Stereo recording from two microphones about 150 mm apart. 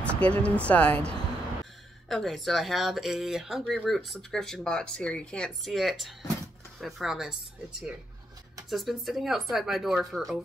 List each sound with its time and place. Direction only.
0.0 s speech: 10° left (ahead or behind)
8.6 s speech: centre (ahead or behind)